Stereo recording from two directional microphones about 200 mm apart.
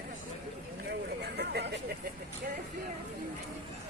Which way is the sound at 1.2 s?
55° right (ahead or behind).